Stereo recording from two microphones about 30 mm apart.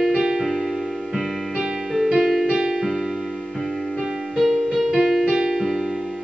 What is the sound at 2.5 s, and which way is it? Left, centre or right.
Music, centre.